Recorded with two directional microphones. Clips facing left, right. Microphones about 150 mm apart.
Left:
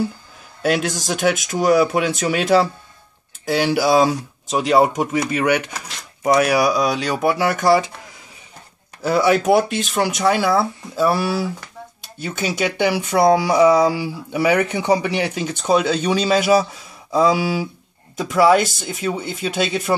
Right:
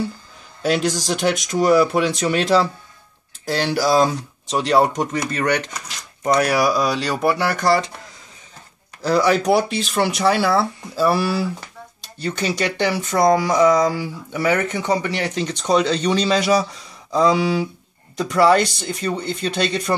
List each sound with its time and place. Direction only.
0.6 s speech: centre (ahead or behind)
9.0 s speech: 5° left (ahead or behind)